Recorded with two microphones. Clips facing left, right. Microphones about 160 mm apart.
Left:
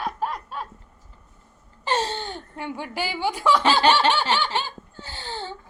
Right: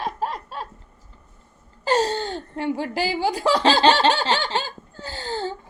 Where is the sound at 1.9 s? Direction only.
40° right (ahead or behind).